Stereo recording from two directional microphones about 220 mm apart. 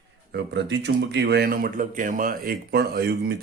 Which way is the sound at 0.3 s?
50° right (ahead or behind).